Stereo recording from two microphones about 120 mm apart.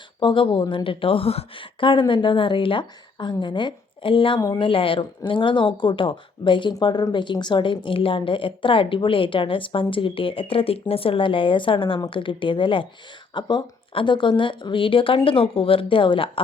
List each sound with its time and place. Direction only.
0.2 s a woman's voice: 45° left (ahead or behind)